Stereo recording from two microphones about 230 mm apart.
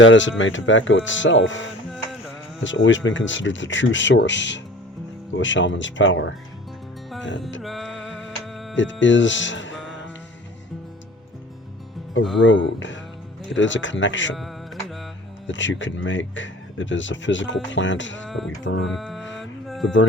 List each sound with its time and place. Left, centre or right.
0.0 s speech: left
7.6 s music: centre
8.7 s speech: left
12.2 s speech: centre
12.5 s speech: left
14.3 s music: centre
15.4 s speech: left
18.3 s music: centre
18.6 s speech: left
18.9 s music: centre
19.4 s mantra: centre